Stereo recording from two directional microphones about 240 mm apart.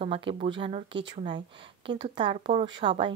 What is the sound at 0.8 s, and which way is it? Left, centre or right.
Speech, right.